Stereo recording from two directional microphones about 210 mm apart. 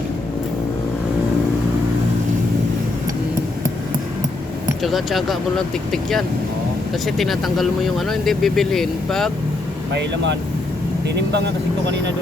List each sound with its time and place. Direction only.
4.8 s speech: centre (ahead or behind)
11.1 s speech: 55° right (ahead or behind)